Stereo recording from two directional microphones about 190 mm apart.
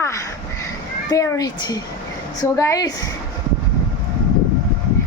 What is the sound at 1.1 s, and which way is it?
A woman's voice, 15° left (ahead or behind).